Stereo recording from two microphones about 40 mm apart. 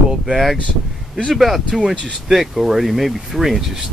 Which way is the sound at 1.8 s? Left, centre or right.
Centre.